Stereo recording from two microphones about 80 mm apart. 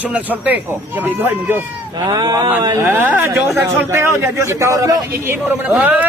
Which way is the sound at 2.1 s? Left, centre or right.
Right.